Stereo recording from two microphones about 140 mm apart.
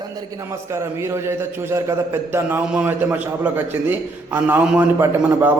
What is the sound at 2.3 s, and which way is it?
A man's voice, 15° right (ahead or behind).